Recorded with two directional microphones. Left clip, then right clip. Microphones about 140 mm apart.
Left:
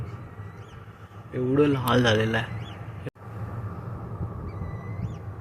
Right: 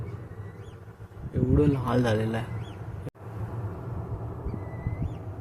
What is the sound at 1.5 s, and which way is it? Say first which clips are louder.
Speech: left 4 dB; centre (ahead or behind).